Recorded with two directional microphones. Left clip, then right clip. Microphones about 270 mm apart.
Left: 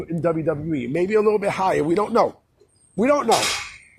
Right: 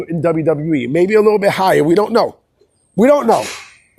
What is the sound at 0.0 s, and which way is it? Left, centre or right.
A woman's voice, right.